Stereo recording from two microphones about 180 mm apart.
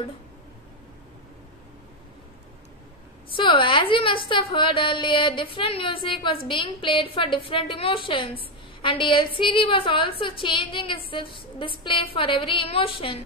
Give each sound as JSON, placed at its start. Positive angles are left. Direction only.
{"t": 3.3, "sound": "a woman's voice", "side_deg": 30}